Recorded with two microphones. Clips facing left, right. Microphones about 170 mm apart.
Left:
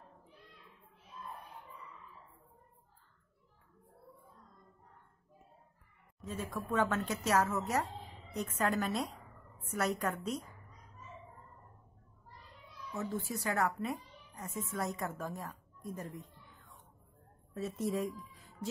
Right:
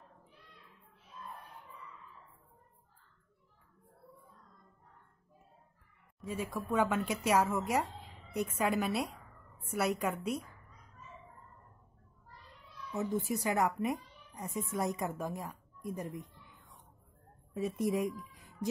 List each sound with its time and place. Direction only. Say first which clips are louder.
6.2 s speech: right 2 dB; 10° right (ahead or behind)
12.9 s speech: right 4 dB; 15° right (ahead or behind)
17.6 s speech: right 3 dB; 15° right (ahead or behind)
18.3 s music: right 4 dB; 15° right (ahead or behind)